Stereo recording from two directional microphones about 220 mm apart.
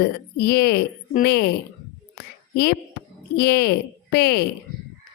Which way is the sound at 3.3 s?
50° left (ahead or behind).